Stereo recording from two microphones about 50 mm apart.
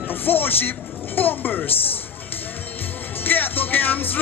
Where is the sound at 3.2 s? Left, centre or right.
Left.